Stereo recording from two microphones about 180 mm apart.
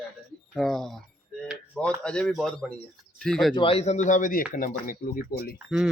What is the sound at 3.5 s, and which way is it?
Speech, 30° left (ahead or behind).